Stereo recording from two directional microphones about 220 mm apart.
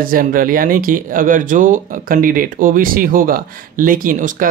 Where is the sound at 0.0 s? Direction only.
40° right (ahead or behind).